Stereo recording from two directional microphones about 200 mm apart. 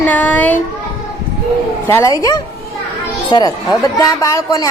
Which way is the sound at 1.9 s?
15° left (ahead or behind).